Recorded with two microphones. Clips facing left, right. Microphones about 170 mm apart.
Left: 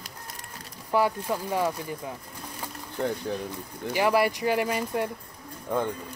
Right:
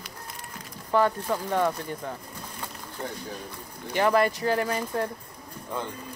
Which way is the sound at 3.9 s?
10° left (ahead or behind).